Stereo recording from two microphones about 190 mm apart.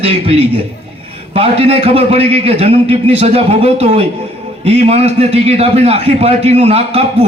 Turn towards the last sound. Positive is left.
turn(degrees=-30)  # may be behind; listen again after turning